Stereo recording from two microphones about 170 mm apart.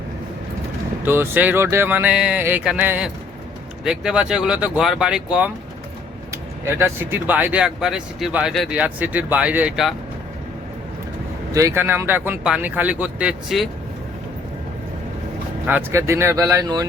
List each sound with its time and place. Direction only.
1.0 s speech: 15° right (ahead or behind)
6.3 s speech: 15° right (ahead or behind)
11.5 s speech: 15° right (ahead or behind)
15.6 s speech: 15° right (ahead or behind)